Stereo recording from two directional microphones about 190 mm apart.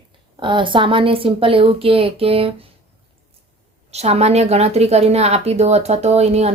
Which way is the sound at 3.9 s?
35° right (ahead or behind).